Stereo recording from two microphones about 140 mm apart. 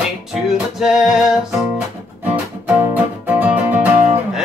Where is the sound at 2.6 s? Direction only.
10° right (ahead or behind).